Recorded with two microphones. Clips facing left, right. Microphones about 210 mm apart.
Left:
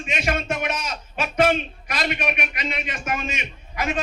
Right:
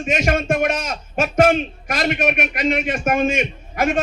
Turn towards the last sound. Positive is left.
turn(degrees=-50)  # may be behind; listen again after turning